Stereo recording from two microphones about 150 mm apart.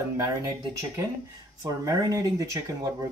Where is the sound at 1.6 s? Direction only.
20° right (ahead or behind).